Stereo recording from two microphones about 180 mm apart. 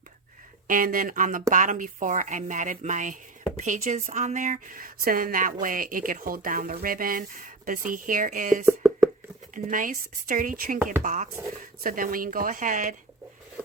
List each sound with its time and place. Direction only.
0.7 s a woman's voice: 50° right (ahead or behind)
8.6 s chopping: 15° right (ahead or behind)
9.6 s a woman's voice: 50° right (ahead or behind)